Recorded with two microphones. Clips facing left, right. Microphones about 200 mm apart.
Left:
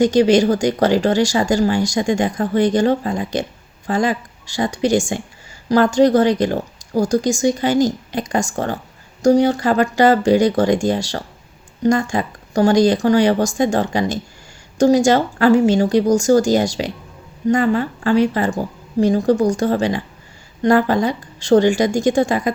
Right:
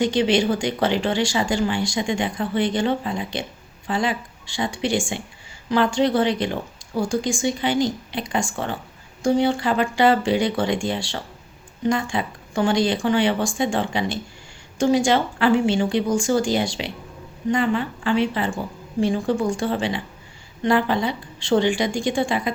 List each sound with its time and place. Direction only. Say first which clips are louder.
0.0 s a woman's voice: left 6 dB; 40° left (ahead or behind)